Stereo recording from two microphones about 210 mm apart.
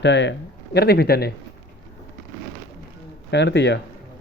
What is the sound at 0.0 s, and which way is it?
Speech, 60° left (ahead or behind).